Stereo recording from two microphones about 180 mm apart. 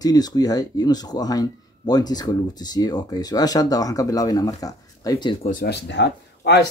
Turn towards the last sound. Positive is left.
turn(degrees=70)  # may be behind; listen again after turning